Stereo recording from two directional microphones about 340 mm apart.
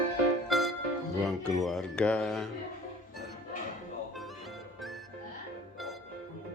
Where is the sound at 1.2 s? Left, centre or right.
Centre.